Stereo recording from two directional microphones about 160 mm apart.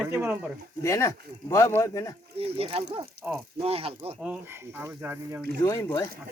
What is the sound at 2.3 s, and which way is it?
Speech, 40° right (ahead or behind).